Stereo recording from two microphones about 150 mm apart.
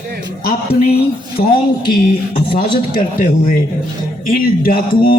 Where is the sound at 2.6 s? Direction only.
65° left (ahead or behind).